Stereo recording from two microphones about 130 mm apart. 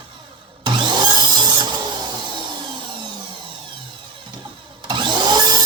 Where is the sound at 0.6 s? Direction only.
35° right (ahead or behind).